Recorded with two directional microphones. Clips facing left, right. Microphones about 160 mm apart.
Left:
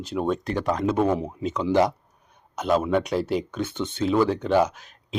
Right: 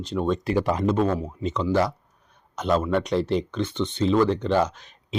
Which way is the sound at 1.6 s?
20° left (ahead or behind).